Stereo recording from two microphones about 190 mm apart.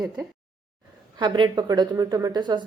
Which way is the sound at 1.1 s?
25° right (ahead or behind).